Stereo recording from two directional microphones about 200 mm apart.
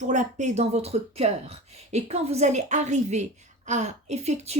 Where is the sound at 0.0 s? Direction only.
35° right (ahead or behind).